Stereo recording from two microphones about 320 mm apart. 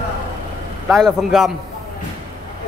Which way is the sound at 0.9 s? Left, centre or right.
Centre.